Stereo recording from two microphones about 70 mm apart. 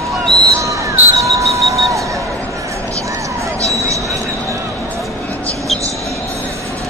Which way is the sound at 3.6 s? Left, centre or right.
Right.